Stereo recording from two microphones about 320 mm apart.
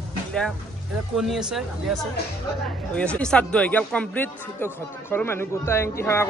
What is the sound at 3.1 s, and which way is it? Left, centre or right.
Speech, centre.